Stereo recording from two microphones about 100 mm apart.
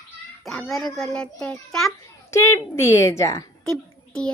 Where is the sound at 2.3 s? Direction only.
25° left (ahead or behind).